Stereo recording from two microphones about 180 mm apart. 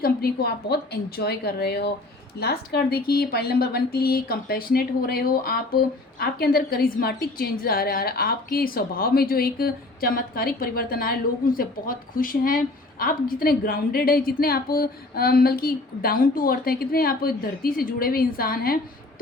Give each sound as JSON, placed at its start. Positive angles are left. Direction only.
{"t": 0.0, "sound": "a woman's voice", "side_deg": 55}